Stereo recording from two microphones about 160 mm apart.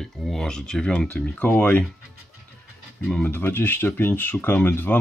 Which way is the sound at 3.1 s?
10° left (ahead or behind).